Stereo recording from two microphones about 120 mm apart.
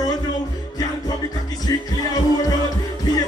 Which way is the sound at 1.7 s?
30° left (ahead or behind).